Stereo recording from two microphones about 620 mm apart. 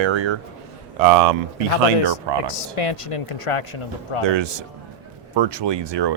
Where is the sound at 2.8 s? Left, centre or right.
Left.